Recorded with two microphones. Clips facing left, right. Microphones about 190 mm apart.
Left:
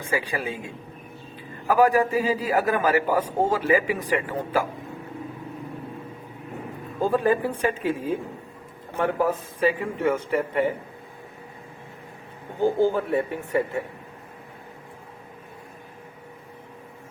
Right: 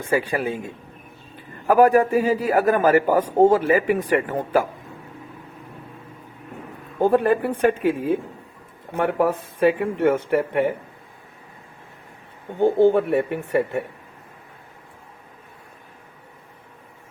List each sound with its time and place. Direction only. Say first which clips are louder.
0.1 s a man's voice: right 5 dB; 50° right (ahead or behind)
7.0 s speech: right 4 dB; 65° right (ahead or behind)
12.5 s speech: right 5 dB; 65° right (ahead or behind)